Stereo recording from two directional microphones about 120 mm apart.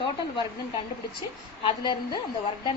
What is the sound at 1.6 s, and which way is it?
Speech, 40° left (ahead or behind).